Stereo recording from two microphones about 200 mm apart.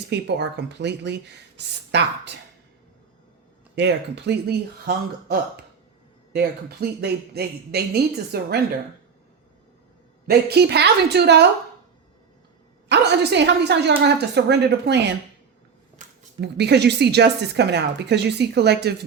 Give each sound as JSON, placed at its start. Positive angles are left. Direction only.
{"t": 0.1, "sound": "speech", "side_deg": -60}
{"t": 3.8, "sound": "speech", "side_deg": -60}
{"t": 10.2, "sound": "speech", "side_deg": -55}
{"t": 12.9, "sound": "speech", "side_deg": -60}
{"t": 16.4, "sound": "speech", "side_deg": -60}